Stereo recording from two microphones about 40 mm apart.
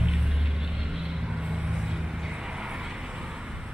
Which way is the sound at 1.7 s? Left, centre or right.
Centre.